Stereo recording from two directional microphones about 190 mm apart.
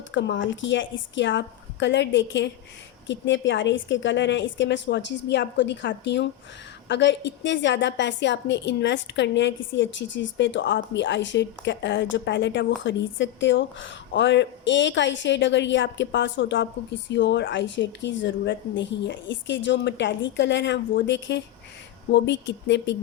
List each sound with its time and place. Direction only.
0.1 s a woman's voice: 75° left (ahead or behind)